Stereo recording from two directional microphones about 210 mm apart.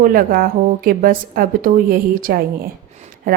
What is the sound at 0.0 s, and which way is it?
Speech, 45° right (ahead or behind).